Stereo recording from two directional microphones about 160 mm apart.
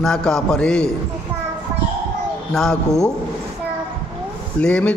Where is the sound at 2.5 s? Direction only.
5° left (ahead or behind).